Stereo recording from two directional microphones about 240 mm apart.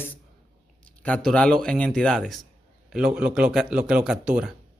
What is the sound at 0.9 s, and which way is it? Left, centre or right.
Speech, centre.